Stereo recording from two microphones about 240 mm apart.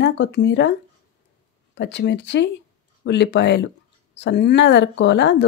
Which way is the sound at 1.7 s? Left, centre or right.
Left.